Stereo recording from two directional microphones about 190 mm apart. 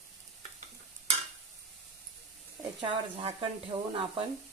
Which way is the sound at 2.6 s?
25° right (ahead or behind).